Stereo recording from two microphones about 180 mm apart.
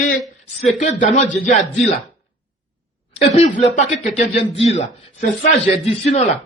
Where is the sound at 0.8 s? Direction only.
40° left (ahead or behind).